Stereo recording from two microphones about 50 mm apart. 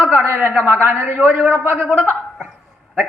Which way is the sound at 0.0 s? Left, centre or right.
Right.